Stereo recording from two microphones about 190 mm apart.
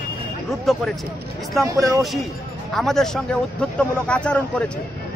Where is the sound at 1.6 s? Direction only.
15° right (ahead or behind).